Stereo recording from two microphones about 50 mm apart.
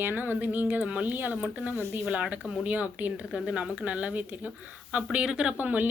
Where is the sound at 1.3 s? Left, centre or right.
Right.